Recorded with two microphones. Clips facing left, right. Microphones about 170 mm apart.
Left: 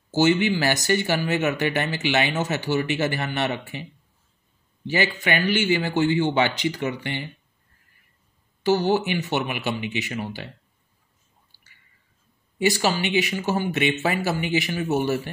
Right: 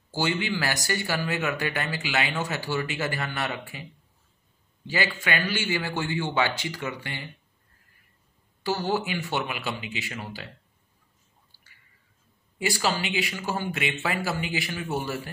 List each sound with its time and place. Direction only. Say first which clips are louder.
0.1 s speech: left 8 dB; 20° left (ahead or behind)
4.8 s a man's voice: left 4 dB; 20° left (ahead or behind)
8.6 s speech: left 6 dB; 20° left (ahead or behind)
12.5 s speech: left 5 dB; 20° left (ahead or behind)